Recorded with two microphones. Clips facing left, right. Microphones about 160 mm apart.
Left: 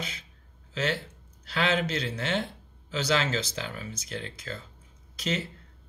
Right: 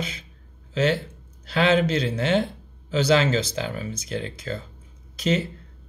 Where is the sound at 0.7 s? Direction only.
20° right (ahead or behind).